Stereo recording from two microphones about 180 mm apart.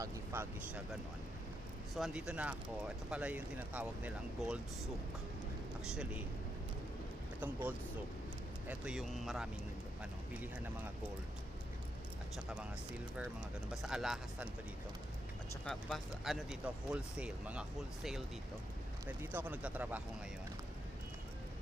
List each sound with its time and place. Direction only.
0.3 s speech: 10° right (ahead or behind)
2.0 s speech: 5° right (ahead or behind)
5.8 s speech: 5° right (ahead or behind)
7.3 s speech: 10° right (ahead or behind)
13.8 s speech: centre (ahead or behind)
15.6 s speech: centre (ahead or behind)